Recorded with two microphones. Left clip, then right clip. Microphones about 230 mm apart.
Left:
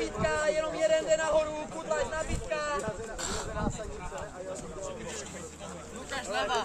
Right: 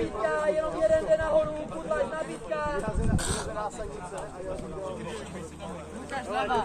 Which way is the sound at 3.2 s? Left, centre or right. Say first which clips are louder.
Right 3 dB; right.